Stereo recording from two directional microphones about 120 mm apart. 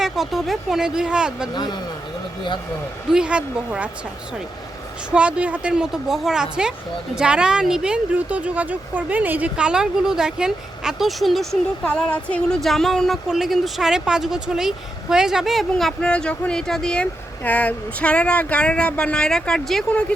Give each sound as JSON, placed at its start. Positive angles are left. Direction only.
{"t": 0.0, "sound": "speech", "side_deg": 0}
{"t": 1.5, "sound": "speech", "side_deg": 35}
{"t": 3.1, "sound": "speech", "side_deg": -10}
{"t": 5.1, "sound": "speech", "side_deg": -10}
{"t": 11.9, "sound": "speech", "side_deg": 10}